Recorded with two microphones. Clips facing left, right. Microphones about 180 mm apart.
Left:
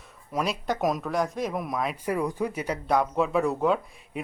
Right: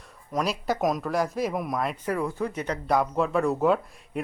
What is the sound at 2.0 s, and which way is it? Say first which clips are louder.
Speech: left 1 dB; 15° left (ahead or behind).